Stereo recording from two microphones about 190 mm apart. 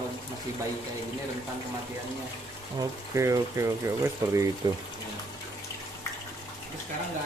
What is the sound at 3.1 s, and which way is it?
Speech, 15° right (ahead or behind).